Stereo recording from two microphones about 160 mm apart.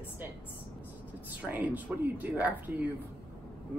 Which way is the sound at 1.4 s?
10° right (ahead or behind).